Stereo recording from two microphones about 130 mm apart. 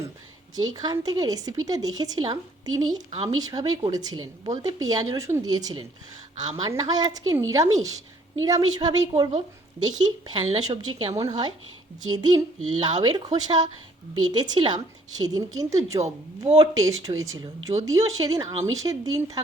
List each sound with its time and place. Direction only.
0.5 s speech: 30° right (ahead or behind)